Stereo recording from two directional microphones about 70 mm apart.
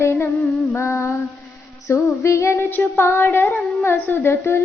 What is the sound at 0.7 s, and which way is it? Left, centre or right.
Female singing, left.